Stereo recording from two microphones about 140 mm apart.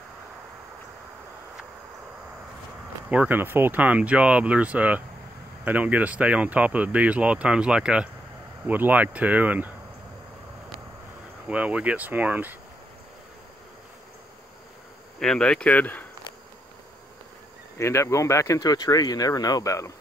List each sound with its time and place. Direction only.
3.1 s speech: 10° right (ahead or behind)
11.4 s speech: 10° right (ahead or behind)
15.1 s speech: 5° left (ahead or behind)
17.7 s speech: 20° left (ahead or behind)